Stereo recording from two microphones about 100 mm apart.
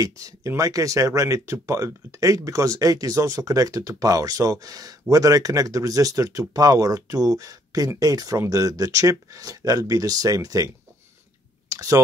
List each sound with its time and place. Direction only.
0.0 s speech: 35° right (ahead or behind)
11.7 s clicking: 35° right (ahead or behind)